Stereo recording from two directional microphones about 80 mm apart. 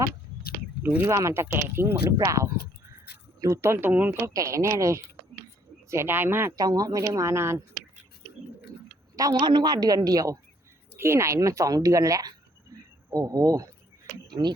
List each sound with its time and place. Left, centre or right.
1.0 s speech: right
2.1 s a woman's voice: right
4.3 s speech: right
6.6 s a woman's voice: right
9.3 s speech: right
10.9 s a woman's voice: right
12.7 s insect: right
13.1 s a woman's voice: right
14.3 s speech: right